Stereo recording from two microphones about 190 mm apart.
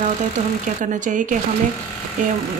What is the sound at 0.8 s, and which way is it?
A woman's voice, 45° right (ahead or behind).